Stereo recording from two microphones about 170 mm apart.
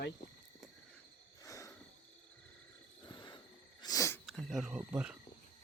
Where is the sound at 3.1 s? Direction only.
25° left (ahead or behind).